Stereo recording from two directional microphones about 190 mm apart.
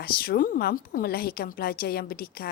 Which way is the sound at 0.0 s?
55° left (ahead or behind).